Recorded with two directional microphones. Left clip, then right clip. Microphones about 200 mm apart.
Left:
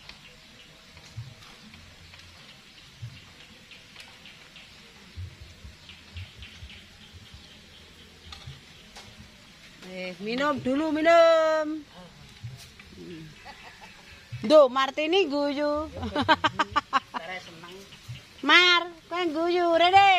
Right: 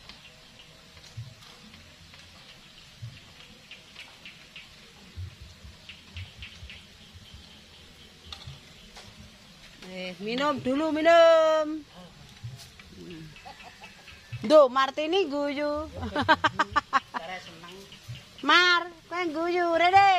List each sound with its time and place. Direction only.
9.9 s speech: 10° right (ahead or behind)
14.4 s speech: centre (ahead or behind)
18.4 s a sound: 5° left (ahead or behind)